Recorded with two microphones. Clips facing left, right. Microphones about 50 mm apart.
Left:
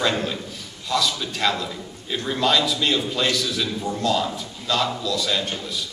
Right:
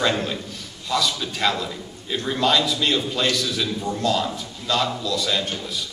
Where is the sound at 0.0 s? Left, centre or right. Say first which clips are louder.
Right 1 dB; centre.